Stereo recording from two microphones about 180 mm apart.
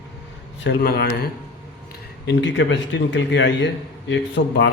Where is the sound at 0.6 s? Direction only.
60° left (ahead or behind).